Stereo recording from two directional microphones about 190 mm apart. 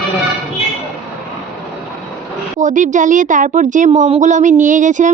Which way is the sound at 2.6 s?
40° right (ahead or behind).